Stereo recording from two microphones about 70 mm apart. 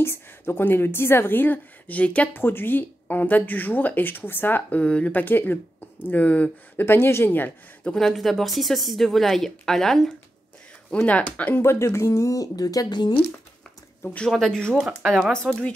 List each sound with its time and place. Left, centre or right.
0.0 s a woman's voice: left; by 2.3 s centre
2.3 s speech: left
6.9 s a woman's voice: left
7.9 s speech: centre
10.9 s speech: centre
11.6 s speech: left
14.3 s speech: centre
14.8 s speech: centre
15.3 s speech: centre